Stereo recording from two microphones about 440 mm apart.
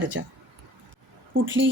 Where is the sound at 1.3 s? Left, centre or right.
Right.